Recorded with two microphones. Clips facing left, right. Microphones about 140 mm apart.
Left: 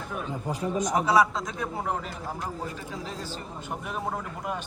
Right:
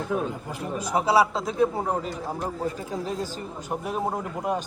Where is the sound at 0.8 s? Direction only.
30° right (ahead or behind).